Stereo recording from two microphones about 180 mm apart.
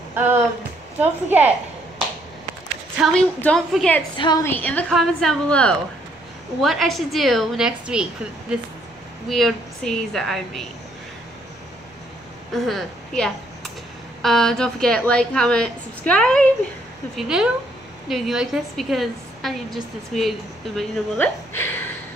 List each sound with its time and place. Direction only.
0.1 s a woman's voice: 10° right (ahead or behind)
3.0 s a woman's voice: 5° left (ahead or behind)
4.2 s a woman's voice: 20° left (ahead or behind)
4.5 s a woman's voice: 10° left (ahead or behind)
12.5 s a woman's voice: centre (ahead or behind)
21.5 s a sound: 10° left (ahead or behind)